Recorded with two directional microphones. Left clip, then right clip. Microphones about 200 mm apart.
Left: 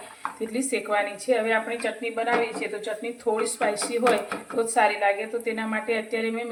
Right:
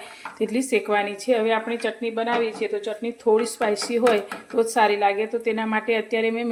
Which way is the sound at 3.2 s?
40° right (ahead or behind).